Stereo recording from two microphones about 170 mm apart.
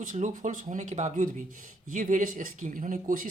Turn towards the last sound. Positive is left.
turn(degrees=-50)  # may be behind; listen again after turning